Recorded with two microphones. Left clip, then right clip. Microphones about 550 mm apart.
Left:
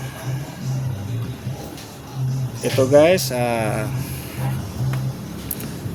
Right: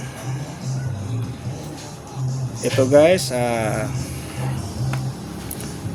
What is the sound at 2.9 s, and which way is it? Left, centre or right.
Speech, left.